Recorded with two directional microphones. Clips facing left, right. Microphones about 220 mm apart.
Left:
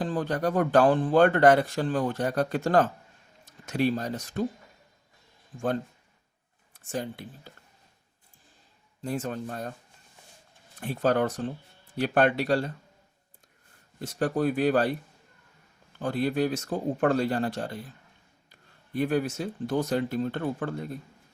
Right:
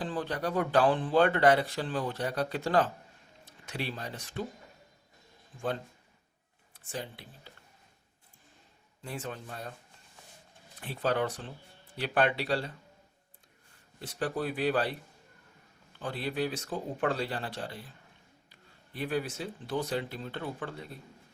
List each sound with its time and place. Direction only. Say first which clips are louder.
0.0 s speech: left 6 dB; 45° left (ahead or behind)
6.7 s speech: left 7 dB; 45° left (ahead or behind)
9.0 s speech: left 8 dB; 40° left (ahead or behind)
10.8 s speech: left 5 dB; 45° left (ahead or behind)
14.0 s speech: left 7 dB; 45° left (ahead or behind)
16.0 s speech: left 7 dB; 45° left (ahead or behind)
18.9 s speech: left 7 dB; 45° left (ahead or behind)